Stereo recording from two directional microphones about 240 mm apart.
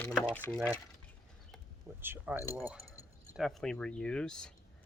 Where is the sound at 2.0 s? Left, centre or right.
Centre.